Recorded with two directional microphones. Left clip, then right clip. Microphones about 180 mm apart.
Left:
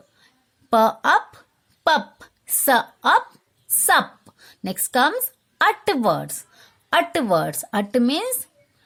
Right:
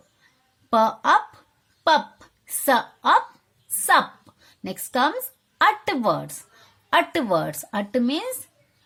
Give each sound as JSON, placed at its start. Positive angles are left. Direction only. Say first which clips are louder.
{"t": 0.7, "sound": "speech", "louder": "left 2 dB", "side_deg": 35}
{"t": 2.1, "sound": "a sound", "louder": "left 7 dB", "side_deg": 35}
{"t": 6.9, "sound": "speech", "louder": "left 1 dB", "side_deg": 30}